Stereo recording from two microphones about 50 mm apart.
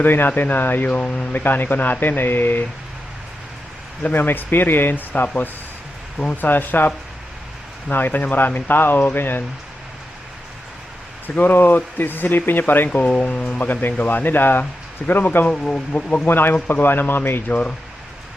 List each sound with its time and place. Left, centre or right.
0.0 s speech: left
0.9 s speech: left
1.3 s speech: left
4.0 s speech: left
6.3 s speech: left
11.3 s speech: left
12.9 s speech: left
15.5 s speech: centre
16.2 s speech: left
17.5 s speech: left